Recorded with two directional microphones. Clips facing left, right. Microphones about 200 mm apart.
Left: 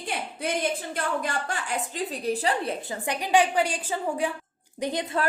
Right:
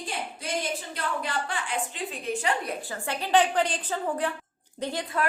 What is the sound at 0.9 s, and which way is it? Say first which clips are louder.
A woman's voice: left 2 dB; 45° left (ahead or behind).